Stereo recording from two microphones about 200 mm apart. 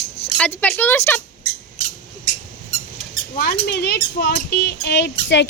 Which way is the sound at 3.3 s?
50° left (ahead or behind).